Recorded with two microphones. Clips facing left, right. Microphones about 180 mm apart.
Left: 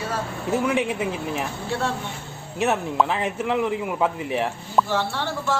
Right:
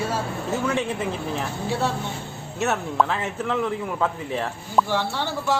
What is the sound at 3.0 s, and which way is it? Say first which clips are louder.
A man's voice: left 2 dB; 15° left (ahead or behind).